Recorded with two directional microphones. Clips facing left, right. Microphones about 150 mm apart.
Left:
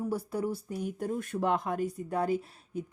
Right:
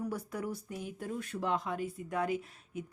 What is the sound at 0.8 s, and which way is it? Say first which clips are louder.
Speech: left 8 dB; 45° left (ahead or behind).